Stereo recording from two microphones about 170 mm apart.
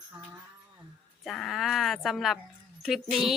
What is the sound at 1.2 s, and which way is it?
Speech, centre (ahead or behind).